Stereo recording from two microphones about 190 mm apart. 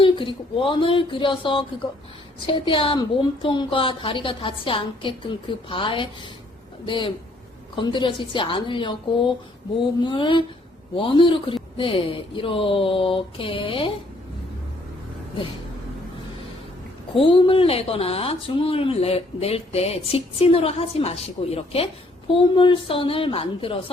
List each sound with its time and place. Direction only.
0.0 s a woman's voice: 25° left (ahead or behind)
10.0 s a woman's voice: 25° left (ahead or behind)
17.2 s a woman's voice: 30° left (ahead or behind)